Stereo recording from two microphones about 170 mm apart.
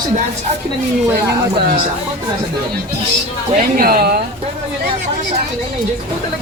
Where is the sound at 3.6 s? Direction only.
60° right (ahead or behind).